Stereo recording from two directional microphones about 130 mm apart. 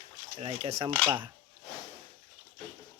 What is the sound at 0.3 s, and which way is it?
Speech, 50° right (ahead or behind).